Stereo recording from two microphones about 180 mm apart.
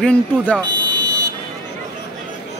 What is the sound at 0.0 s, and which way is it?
Speech, 5° left (ahead or behind).